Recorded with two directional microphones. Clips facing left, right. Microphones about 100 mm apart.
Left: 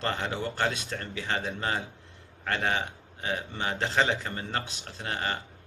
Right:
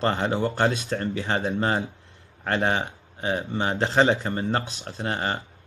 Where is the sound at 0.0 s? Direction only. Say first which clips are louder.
Right 7 dB; 30° right (ahead or behind).